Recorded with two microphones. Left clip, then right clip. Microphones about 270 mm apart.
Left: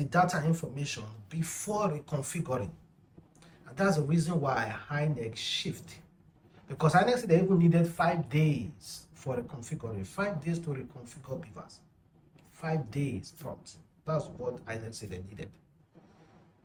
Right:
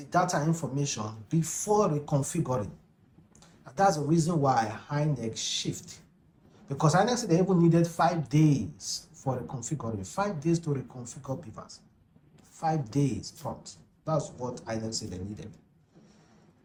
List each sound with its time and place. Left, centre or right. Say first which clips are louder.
0.0 s speech: right 1 dB; centre